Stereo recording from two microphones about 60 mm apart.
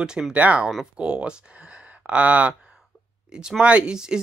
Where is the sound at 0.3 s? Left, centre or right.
Right.